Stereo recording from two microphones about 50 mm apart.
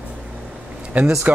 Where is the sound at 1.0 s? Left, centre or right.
Right.